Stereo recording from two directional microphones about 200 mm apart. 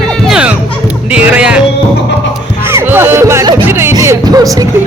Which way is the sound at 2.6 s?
10° right (ahead or behind).